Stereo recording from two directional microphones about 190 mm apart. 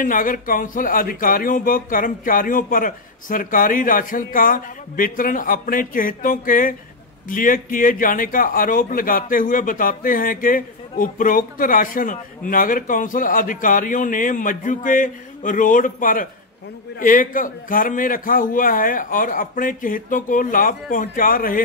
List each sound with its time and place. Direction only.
0.0 s speech: 45° left (ahead or behind)